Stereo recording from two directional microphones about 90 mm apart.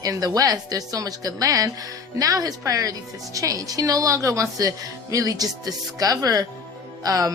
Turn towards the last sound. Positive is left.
turn(degrees=-40)  # may be behind; listen again after turning